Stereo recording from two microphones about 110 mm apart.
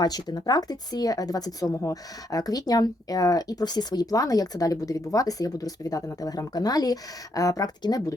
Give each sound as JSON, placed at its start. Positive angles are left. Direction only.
{"t": 0.0, "sound": "a woman's voice", "side_deg": 40}